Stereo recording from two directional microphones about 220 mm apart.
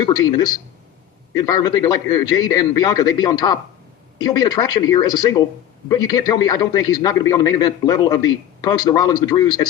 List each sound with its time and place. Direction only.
0.0 s a man's voice: 20° left (ahead or behind)